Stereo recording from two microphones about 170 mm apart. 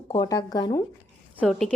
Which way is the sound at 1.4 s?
5° left (ahead or behind).